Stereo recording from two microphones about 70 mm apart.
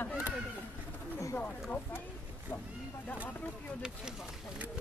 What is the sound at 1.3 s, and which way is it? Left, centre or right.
Speech, centre.